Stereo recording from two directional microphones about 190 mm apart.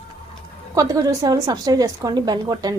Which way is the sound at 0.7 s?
20° right (ahead or behind).